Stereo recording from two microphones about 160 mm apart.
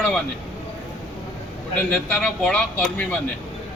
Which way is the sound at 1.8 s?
10° left (ahead or behind).